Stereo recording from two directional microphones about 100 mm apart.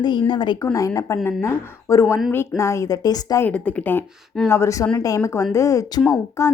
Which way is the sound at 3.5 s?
10° left (ahead or behind).